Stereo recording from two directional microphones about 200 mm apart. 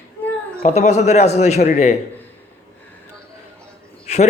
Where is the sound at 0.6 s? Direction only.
35° left (ahead or behind).